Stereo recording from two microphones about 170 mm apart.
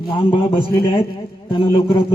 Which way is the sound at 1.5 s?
30° left (ahead or behind).